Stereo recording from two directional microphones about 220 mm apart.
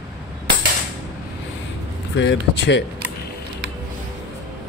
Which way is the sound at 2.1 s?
55° left (ahead or behind).